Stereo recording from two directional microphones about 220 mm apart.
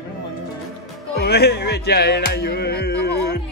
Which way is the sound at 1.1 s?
45° left (ahead or behind).